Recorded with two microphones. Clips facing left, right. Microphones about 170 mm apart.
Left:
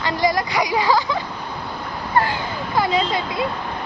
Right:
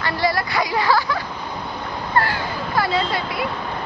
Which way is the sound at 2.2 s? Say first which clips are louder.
Left 1 dB; 15° left (ahead or behind).